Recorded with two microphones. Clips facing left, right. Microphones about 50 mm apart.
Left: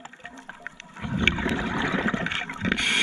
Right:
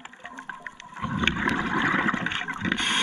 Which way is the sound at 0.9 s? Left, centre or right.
Right.